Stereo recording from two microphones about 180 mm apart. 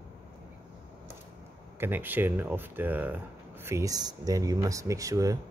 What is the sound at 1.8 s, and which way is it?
Speech, 10° right (ahead or behind).